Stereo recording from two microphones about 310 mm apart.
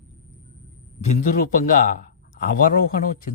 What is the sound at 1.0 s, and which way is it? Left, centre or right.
Speech, left.